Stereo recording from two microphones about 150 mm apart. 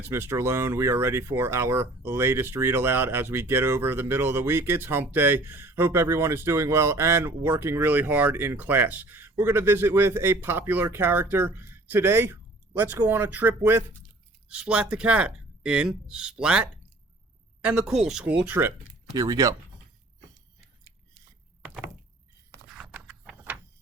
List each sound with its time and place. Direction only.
0.0 s speech: 15° right (ahead or behind)
19.1 s speech: 25° right (ahead or behind)
22.7 s a sound: 5° right (ahead or behind)